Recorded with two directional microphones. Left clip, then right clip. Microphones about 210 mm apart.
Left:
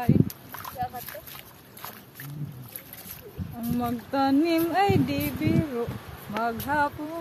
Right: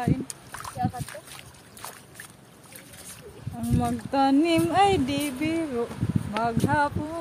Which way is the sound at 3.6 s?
15° right (ahead or behind).